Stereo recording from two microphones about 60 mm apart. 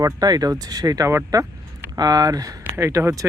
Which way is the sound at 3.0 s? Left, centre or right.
Right.